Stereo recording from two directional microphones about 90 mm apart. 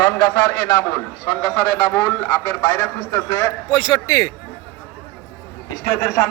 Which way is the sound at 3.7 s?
65° left (ahead or behind).